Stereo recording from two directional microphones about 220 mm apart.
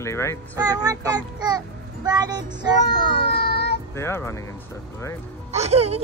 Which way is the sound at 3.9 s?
10° left (ahead or behind).